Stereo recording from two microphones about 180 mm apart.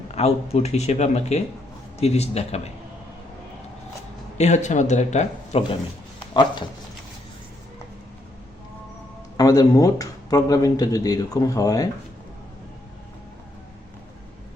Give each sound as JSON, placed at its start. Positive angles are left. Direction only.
{"t": 0.1, "sound": "speech", "side_deg": 35}
{"t": 4.4, "sound": "speech", "side_deg": 40}
{"t": 6.3, "sound": "speech", "side_deg": 25}
{"t": 9.4, "sound": "speech", "side_deg": 20}